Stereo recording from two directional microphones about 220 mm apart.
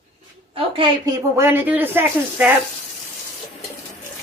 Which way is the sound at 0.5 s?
25° right (ahead or behind).